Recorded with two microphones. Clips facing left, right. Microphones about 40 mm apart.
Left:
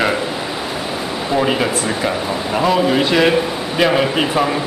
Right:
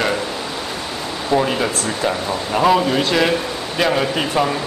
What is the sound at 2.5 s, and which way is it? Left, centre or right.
Speech, centre.